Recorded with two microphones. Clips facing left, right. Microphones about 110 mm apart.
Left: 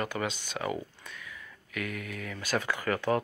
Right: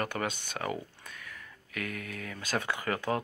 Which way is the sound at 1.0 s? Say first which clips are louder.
Left 1 dB; 40° right (ahead or behind).